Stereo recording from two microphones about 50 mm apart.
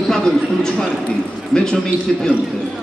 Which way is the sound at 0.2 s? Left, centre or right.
Centre.